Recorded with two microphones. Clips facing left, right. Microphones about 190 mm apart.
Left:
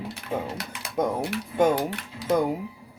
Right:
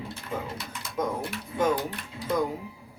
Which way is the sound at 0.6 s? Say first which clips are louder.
Left 4 dB; 70° left (ahead or behind).